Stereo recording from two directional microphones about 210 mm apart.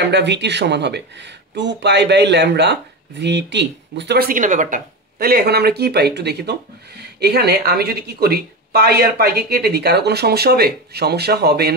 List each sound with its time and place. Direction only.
0.0 s speech: 55° right (ahead or behind)